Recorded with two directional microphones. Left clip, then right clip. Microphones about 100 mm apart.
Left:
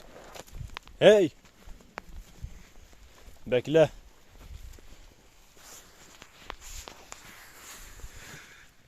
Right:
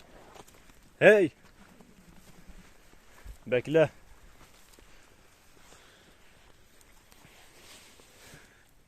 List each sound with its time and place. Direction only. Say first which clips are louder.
0.9 s speech: left 1 dB; 20° left (ahead or behind)
3.5 s speech: left 2 dB; 40° left (ahead or behind)